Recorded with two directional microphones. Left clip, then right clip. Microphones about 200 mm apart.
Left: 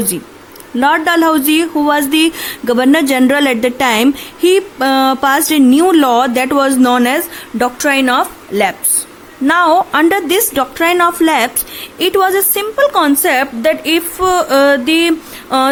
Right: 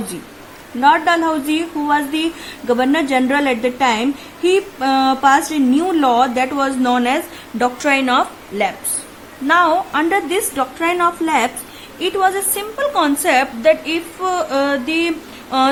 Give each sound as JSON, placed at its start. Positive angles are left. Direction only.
{"t": 0.8, "sound": "a woman's voice", "side_deg": 40}
{"t": 9.5, "sound": "a woman's voice", "side_deg": 40}